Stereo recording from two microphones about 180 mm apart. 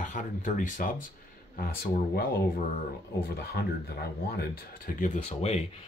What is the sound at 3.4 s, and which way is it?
Speech, 65° left (ahead or behind).